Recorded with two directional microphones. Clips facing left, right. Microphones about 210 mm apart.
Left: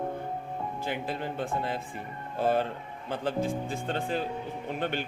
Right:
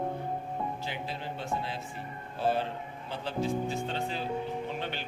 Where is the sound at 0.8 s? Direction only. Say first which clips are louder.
Left 5 dB; 50° left (ahead or behind).